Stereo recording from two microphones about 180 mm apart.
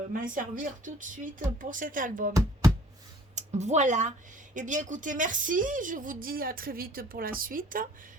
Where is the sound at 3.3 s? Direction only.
40° right (ahead or behind).